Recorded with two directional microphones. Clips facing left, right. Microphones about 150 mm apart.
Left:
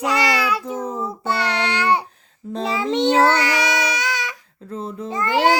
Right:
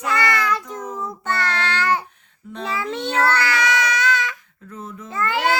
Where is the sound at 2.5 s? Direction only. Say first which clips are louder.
Left 4 dB; 35° left (ahead or behind).